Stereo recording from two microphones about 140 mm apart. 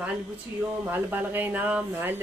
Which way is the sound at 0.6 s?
15° right (ahead or behind).